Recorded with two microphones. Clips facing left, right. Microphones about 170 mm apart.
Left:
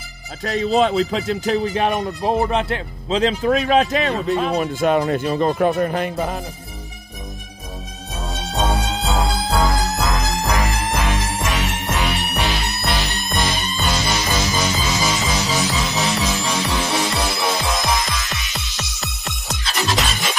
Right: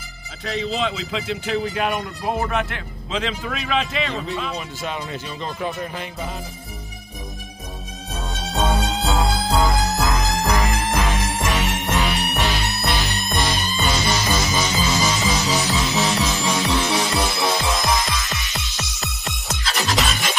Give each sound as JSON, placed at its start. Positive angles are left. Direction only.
{"t": 0.4, "sound": "speech", "side_deg": 45}
{"t": 8.2, "sound": "music", "side_deg": 0}